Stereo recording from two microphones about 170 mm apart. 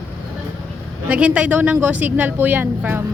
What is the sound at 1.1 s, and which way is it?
A woman's voice, 10° right (ahead or behind).